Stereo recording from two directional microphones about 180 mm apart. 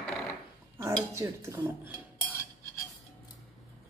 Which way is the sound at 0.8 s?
15° right (ahead or behind).